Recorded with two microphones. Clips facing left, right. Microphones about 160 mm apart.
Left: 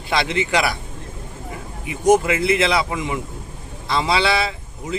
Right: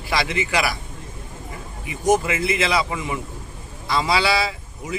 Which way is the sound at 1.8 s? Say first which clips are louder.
Left 4 dB; 20° left (ahead or behind).